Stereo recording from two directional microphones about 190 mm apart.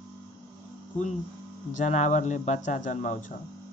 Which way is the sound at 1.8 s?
40° left (ahead or behind).